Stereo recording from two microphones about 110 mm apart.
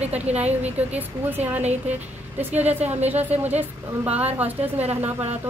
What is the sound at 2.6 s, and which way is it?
Speech, 80° right.